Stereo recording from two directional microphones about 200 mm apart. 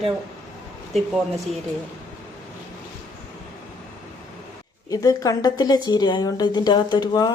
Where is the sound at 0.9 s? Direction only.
Centre (ahead or behind).